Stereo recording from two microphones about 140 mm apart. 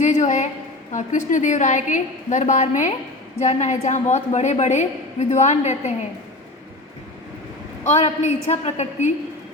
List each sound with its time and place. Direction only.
0.0 s a sound: 60° left (ahead or behind)
0.9 s a woman's voice: 60° left (ahead or behind)
7.9 s a woman's voice: 50° left (ahead or behind)